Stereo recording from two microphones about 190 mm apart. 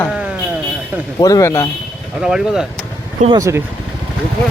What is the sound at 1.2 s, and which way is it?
Speech, 15° left (ahead or behind).